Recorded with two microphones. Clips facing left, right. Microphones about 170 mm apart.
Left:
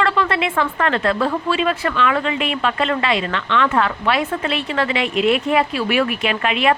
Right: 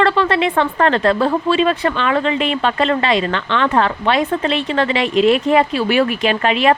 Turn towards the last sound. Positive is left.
turn(degrees=-35)  # may be behind; listen again after turning